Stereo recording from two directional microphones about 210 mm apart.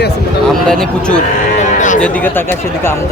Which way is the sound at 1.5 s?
35° left (ahead or behind).